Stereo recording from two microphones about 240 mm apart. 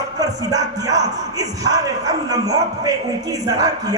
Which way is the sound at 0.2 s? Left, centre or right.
Centre.